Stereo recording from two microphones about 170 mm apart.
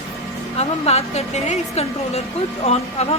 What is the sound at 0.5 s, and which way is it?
A woman's voice, 40° left (ahead or behind).